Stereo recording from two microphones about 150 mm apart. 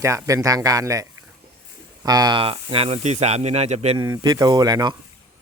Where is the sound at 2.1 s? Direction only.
25° right (ahead or behind); by 3.9 s 45° right (ahead or behind).